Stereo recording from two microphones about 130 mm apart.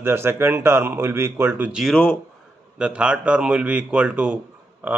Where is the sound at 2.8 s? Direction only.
10° right (ahead or behind).